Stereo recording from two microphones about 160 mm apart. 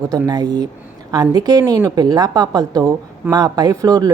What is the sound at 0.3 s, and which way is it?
A woman's voice, 25° right (ahead or behind).